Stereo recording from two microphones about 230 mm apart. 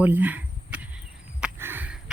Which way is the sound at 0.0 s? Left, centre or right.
Centre.